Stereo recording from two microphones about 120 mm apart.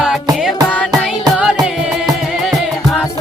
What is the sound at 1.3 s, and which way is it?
Music, 5° right (ahead or behind).